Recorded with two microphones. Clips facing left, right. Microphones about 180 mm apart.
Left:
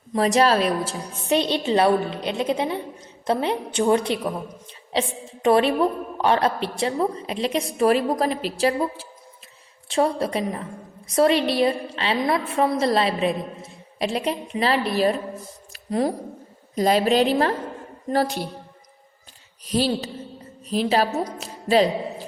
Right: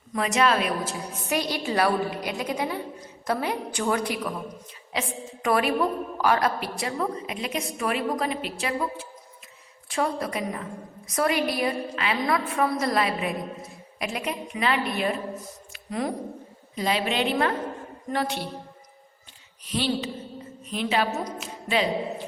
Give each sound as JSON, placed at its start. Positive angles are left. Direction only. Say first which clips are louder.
{"t": 0.1, "sound": "a woman's voice", "louder": "left 5 dB", "side_deg": 35}
{"t": 15.7, "sound": "a sound", "louder": "left 6 dB", "side_deg": 35}
{"t": 16.7, "sound": "a woman's voice", "louder": "left 7 dB", "side_deg": 40}
{"t": 19.6, "sound": "a woman's voice", "louder": "left 4 dB", "side_deg": 40}